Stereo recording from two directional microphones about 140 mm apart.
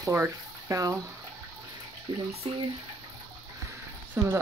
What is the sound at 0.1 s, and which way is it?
Speech, 15° right (ahead or behind).